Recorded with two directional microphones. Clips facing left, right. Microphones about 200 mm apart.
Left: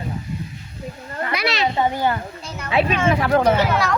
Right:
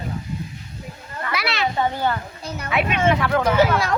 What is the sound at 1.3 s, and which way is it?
Children playing, 20° left (ahead or behind).